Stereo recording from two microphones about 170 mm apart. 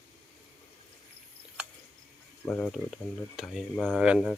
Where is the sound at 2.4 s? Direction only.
10° left (ahead or behind).